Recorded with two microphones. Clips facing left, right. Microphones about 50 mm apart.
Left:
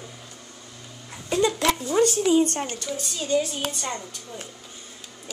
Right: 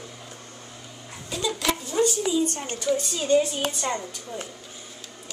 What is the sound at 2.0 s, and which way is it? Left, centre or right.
Speech, left.